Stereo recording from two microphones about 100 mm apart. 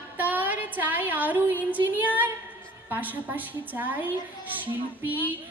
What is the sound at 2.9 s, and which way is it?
A woman's voice, 15° right (ahead or behind).